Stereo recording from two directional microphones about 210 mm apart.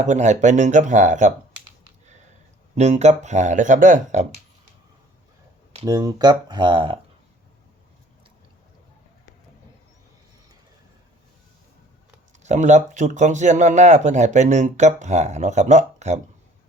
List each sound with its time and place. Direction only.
0.0 s speech: 35° right (ahead or behind)
2.7 s speech: 35° right (ahead or behind)
5.7 s speech: 20° right (ahead or behind)
12.4 s speech: 35° right (ahead or behind)